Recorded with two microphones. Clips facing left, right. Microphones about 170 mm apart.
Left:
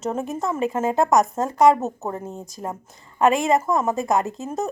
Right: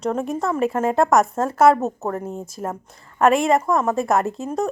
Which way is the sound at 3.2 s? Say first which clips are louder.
Right 2 dB; centre (ahead or behind).